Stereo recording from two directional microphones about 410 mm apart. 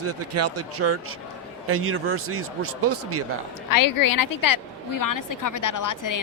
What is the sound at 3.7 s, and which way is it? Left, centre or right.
A woman's voice, left.